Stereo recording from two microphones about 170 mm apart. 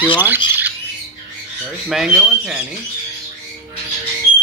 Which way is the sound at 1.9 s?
5° right (ahead or behind).